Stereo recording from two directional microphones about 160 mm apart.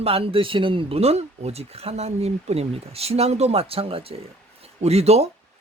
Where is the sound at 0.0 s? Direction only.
35° right (ahead or behind).